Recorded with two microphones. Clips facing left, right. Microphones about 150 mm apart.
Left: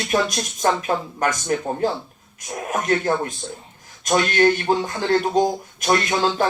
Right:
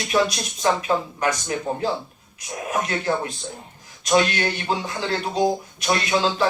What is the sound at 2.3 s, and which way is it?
Speech, 45° left (ahead or behind).